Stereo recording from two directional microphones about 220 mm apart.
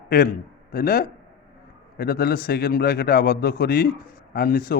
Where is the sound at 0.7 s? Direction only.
40° left (ahead or behind).